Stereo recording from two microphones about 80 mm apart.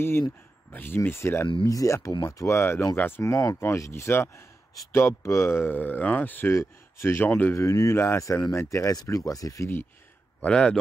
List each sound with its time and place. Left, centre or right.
0.7 s speech: left
1.7 s speech: left
6.5 s speech: left
7.2 s speech: left
7.5 s speech: left
10.4 s speech: centre